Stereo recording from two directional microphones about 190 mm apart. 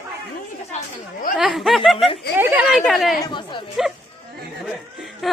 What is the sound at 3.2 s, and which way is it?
Speech, 25° left (ahead or behind).